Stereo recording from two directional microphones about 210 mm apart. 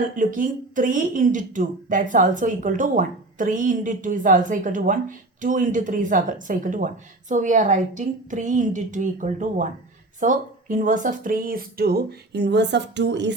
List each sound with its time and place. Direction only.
0.2 s a woman's voice: 40° right (ahead or behind); by 13.3 s 55° right (ahead or behind)